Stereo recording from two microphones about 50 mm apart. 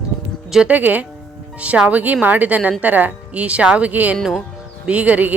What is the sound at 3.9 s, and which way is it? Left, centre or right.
Speech, right.